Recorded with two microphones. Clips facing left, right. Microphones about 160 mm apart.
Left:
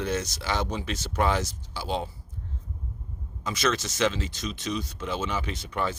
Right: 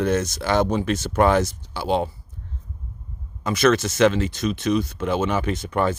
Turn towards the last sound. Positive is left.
turn(degrees=-50)  # may be behind; listen again after turning